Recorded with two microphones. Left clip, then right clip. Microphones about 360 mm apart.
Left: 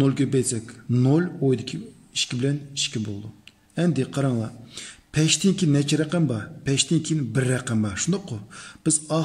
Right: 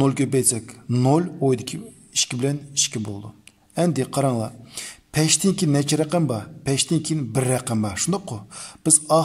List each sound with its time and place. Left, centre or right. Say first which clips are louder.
0.0 s a man's voice: right 2 dB; centre